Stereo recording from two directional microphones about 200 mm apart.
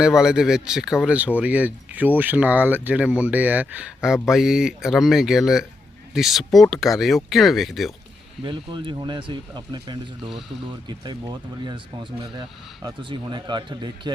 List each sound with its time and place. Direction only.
0.0 s speech: 5° right (ahead or behind)
8.4 s speech: 25° right (ahead or behind)